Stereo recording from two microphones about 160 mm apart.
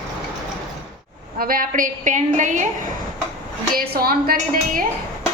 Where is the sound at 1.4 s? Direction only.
65° right (ahead or behind).